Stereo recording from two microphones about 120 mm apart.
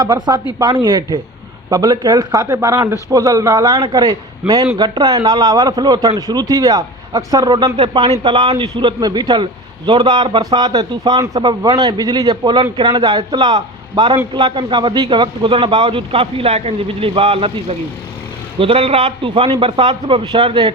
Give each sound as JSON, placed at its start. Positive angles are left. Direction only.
{"t": 0.0, "sound": "a man's voice", "side_deg": -35}
{"t": 11.3, "sound": "a man's voice", "side_deg": -45}